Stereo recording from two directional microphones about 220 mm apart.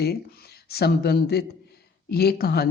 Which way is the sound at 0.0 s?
45° left (ahead or behind).